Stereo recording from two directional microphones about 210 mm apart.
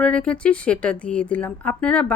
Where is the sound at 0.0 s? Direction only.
5° left (ahead or behind).